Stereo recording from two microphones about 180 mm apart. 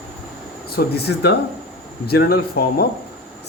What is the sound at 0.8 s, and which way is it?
Speech, 65° left (ahead or behind).